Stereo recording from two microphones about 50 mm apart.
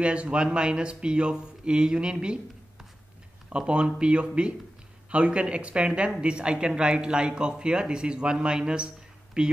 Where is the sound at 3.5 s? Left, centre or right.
Right.